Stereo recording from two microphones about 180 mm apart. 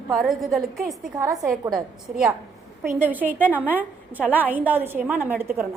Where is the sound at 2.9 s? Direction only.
10° right (ahead or behind).